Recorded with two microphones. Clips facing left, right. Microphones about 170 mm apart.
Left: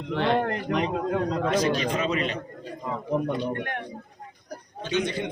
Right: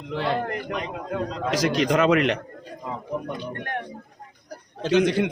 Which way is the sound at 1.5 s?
90° right.